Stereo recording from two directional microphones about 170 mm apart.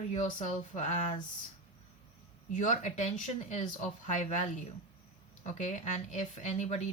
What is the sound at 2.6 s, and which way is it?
Speech, 45° left (ahead or behind).